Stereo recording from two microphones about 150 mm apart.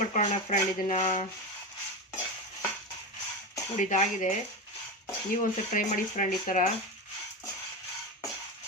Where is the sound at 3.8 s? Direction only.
55° left (ahead or behind).